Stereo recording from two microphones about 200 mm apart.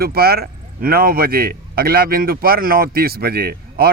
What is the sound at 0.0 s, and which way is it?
Speech, 50° right (ahead or behind).